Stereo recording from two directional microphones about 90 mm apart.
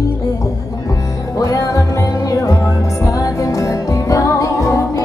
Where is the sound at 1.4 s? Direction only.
40° left (ahead or behind).